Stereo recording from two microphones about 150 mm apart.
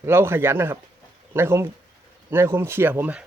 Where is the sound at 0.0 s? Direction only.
15° right (ahead or behind).